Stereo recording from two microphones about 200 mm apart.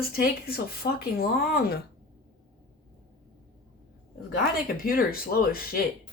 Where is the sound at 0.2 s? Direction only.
50° left (ahead or behind).